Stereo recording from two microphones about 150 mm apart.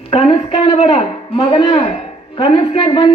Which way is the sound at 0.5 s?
45° left (ahead or behind).